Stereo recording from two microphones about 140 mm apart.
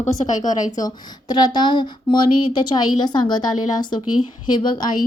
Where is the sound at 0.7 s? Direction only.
30° left (ahead or behind).